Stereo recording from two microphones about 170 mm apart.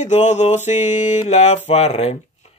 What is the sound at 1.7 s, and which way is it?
Speech, 40° left (ahead or behind).